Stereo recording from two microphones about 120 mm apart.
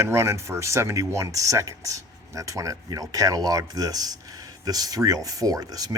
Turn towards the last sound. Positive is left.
turn(degrees=-30)  # may be behind; listen again after turning